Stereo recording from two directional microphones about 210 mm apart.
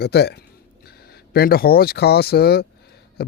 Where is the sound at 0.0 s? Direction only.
50° left (ahead or behind).